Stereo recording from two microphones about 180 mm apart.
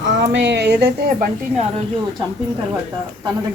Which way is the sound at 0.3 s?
75° right (ahead or behind).